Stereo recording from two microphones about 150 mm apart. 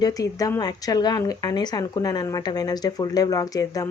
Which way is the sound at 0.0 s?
25° left (ahead or behind).